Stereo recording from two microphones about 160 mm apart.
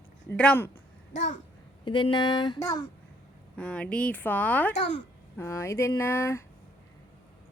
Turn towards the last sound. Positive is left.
turn(degrees=15)  # may be behind; listen again after turning